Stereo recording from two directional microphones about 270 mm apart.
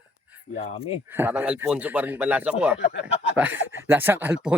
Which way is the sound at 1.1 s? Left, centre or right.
Centre.